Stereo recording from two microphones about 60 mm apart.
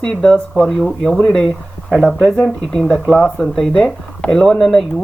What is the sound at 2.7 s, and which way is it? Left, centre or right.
Speech, centre.